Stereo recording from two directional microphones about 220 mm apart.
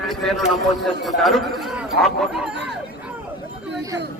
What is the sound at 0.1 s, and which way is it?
A man's voice, centre (ahead or behind).